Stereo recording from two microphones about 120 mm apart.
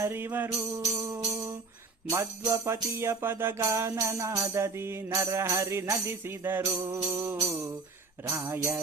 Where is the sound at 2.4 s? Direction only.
30° right (ahead or behind).